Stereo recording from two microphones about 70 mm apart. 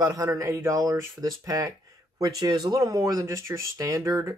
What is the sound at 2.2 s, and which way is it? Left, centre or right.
Speech, right.